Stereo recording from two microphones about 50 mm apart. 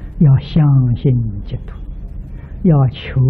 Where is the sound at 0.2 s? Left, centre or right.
Centre.